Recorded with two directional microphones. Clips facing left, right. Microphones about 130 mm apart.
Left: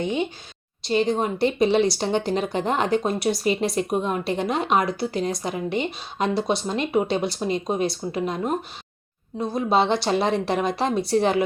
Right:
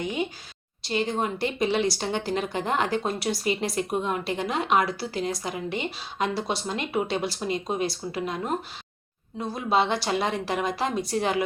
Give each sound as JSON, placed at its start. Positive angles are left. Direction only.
{"t": 0.0, "sound": "speech", "side_deg": 25}
{"t": 9.4, "sound": "speech", "side_deg": 25}